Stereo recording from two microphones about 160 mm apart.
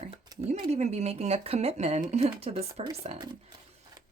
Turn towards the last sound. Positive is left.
turn(degrees=-40)  # may be behind; listen again after turning